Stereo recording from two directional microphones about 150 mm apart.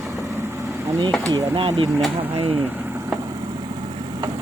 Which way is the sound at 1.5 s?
35° right (ahead or behind).